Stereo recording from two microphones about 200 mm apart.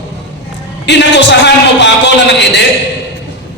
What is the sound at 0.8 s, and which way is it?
A man's voice, 60° left (ahead or behind).